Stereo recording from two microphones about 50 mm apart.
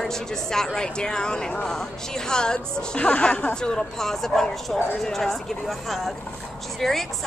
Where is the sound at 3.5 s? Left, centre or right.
Centre.